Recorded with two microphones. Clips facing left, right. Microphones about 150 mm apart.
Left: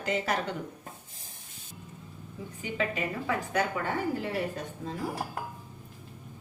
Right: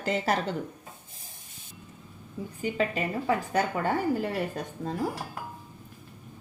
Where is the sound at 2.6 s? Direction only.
40° right (ahead or behind).